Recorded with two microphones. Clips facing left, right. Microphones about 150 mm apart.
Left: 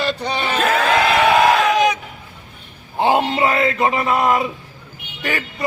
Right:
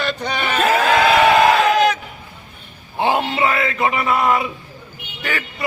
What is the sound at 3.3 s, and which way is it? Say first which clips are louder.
A man's voice: left 2 dB; 35° left (ahead or behind).